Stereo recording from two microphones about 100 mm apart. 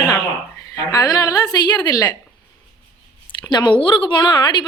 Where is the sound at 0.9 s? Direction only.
35° left (ahead or behind).